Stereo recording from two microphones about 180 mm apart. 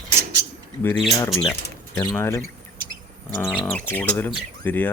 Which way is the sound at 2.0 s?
15° left (ahead or behind).